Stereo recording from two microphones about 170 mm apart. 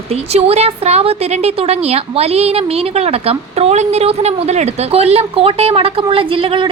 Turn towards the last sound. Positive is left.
turn(degrees=-30)  # may be behind; listen again after turning